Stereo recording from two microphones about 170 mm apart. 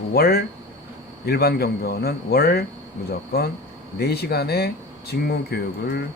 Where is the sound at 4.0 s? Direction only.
70° left (ahead or behind).